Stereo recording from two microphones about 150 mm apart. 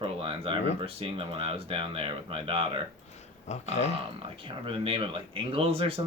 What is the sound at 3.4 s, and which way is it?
Speech, 50° left (ahead or behind).